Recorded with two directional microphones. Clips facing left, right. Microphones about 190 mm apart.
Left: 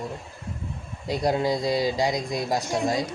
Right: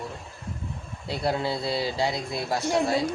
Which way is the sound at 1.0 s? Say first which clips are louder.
Left 4 dB; 15° left (ahead or behind).